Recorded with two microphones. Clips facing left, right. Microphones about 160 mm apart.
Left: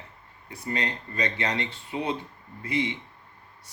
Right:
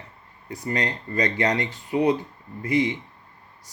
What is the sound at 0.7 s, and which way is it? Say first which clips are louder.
Speech: right 4 dB; 25° left (ahead or behind).